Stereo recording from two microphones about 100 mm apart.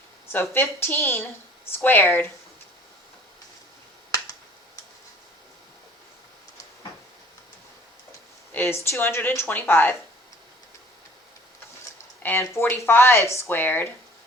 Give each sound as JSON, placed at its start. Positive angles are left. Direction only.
{"t": 0.5, "sound": "speech", "side_deg": 20}
{"t": 8.5, "sound": "speech", "side_deg": 25}
{"t": 12.2, "sound": "speech", "side_deg": 25}